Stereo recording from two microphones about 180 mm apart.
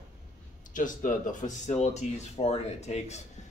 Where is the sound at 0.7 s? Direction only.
45° left (ahead or behind).